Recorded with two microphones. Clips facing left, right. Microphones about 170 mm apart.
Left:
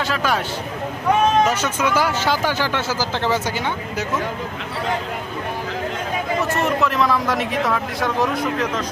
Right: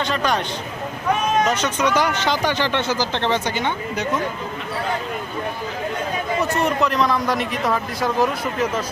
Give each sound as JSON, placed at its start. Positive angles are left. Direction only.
{"t": 0.0, "sound": "speech", "side_deg": 5}
{"t": 1.5, "sound": "speech", "side_deg": 5}
{"t": 6.4, "sound": "speech", "side_deg": 0}